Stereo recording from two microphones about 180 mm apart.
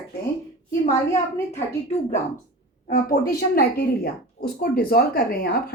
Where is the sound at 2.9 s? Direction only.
55° left (ahead or behind).